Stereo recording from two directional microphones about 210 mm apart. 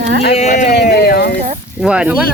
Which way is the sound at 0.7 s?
50° left (ahead or behind).